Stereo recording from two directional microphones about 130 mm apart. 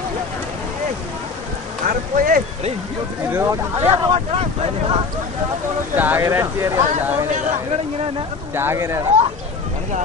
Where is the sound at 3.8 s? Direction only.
50° right (ahead or behind).